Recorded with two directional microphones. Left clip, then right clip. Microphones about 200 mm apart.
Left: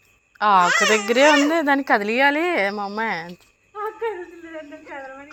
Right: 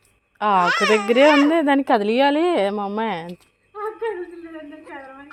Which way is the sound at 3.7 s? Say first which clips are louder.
Even; 50° right (ahead or behind).